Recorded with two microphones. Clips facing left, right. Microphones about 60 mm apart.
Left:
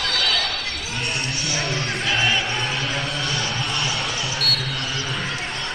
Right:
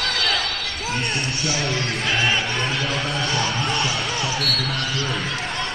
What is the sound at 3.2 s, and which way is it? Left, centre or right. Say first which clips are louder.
Music: right 3 dB; right.